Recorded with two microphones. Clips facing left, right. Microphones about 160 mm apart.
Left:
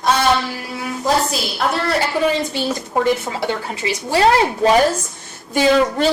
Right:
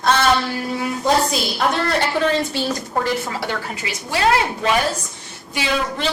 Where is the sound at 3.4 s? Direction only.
25° left (ahead or behind).